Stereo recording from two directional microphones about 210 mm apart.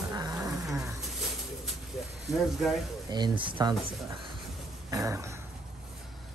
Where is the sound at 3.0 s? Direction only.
20° right (ahead or behind).